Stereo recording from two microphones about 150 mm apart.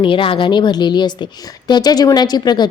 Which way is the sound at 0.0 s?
35° left (ahead or behind).